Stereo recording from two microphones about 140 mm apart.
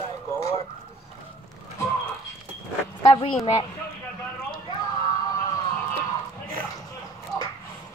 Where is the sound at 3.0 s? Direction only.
45° left (ahead or behind).